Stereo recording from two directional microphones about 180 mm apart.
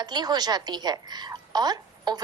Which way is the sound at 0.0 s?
25° right (ahead or behind).